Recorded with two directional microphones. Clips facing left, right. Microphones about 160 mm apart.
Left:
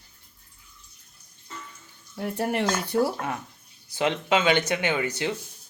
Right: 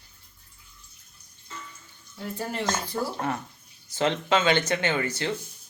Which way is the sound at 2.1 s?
65° left (ahead or behind).